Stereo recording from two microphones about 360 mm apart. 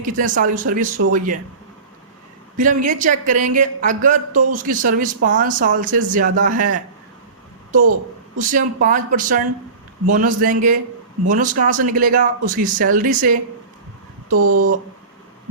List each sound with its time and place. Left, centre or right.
0.0 s speech: right
2.6 s speech: right
8.4 s speech: right
14.4 s speech: right